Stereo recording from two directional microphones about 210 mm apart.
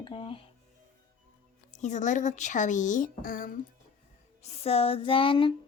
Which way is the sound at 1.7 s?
35° left (ahead or behind).